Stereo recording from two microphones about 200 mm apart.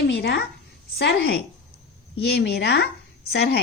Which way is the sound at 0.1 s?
60° left (ahead or behind).